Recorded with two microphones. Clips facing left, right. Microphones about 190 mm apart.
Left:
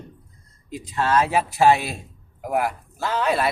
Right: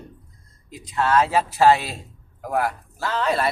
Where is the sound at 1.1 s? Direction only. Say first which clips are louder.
Right 1 dB; 15° left (ahead or behind).